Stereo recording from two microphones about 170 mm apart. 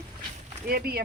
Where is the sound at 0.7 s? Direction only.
65° right (ahead or behind).